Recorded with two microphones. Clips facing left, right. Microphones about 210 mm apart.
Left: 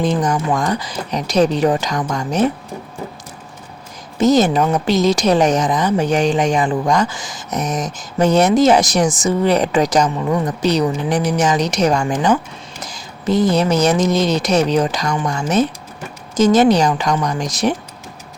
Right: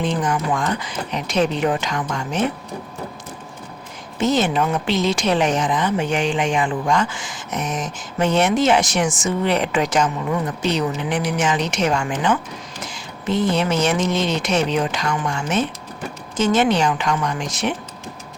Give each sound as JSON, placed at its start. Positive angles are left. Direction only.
{"t": 0.0, "sound": "speech", "side_deg": 40}
{"t": 4.2, "sound": "speech", "side_deg": 40}